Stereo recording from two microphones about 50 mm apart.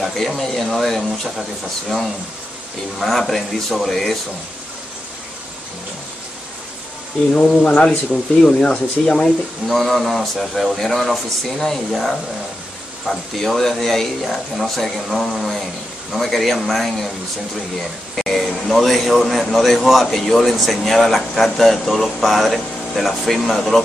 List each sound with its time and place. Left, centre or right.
0.0 s a man's voice: centre
3.0 s a man's voice: centre
7.3 s speech: left
9.7 s a man's voice: centre
13.5 s a man's voice: centre